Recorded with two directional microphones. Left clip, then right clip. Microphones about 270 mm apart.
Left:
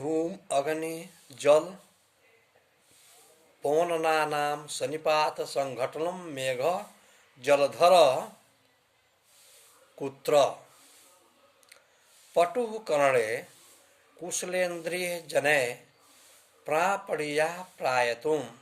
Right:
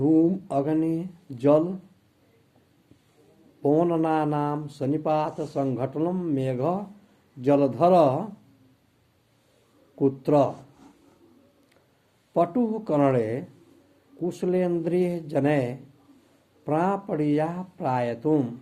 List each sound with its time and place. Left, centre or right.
0.1 s speech: centre
3.6 s speech: centre
10.0 s speech: centre
12.3 s speech: centre